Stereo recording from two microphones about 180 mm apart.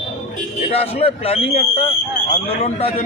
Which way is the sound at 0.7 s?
35° left (ahead or behind).